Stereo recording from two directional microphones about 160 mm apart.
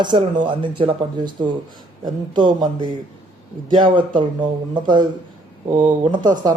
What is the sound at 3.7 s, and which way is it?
Speech, 30° right (ahead or behind).